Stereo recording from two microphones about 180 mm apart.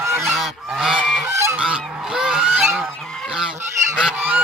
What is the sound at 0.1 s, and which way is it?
Goose, centre (ahead or behind).